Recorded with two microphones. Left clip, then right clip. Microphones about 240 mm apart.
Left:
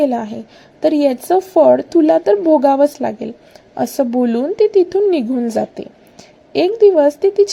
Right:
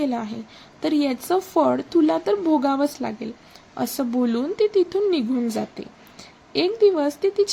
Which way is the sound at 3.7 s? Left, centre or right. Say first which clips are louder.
Left 9 dB; right.